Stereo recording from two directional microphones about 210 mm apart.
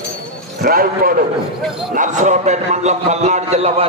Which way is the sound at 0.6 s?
45° right (ahead or behind).